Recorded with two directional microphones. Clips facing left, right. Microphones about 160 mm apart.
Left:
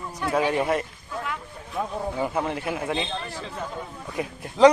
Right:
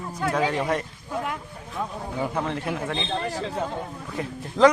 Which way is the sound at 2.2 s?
10° left (ahead or behind).